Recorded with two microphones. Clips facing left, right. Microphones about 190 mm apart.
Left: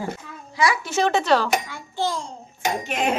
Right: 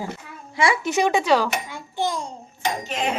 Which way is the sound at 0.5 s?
25° right (ahead or behind).